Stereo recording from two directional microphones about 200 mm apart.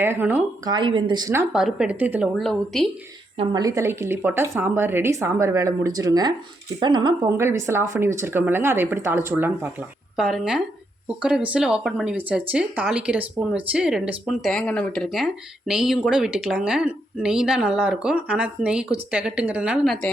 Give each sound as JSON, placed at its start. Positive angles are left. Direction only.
{"t": 0.0, "sound": "a woman's voice", "side_deg": -10}
{"t": 0.7, "sound": "speech", "side_deg": -25}
{"t": 1.3, "sound": "a woman's voice", "side_deg": -10}
{"t": 3.3, "sound": "a woman's voice", "side_deg": -20}